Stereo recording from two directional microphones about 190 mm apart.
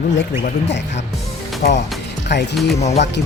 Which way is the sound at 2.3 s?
60° left (ahead or behind).